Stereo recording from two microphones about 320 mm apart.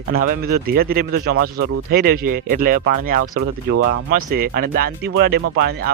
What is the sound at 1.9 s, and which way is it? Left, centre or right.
Speech, right.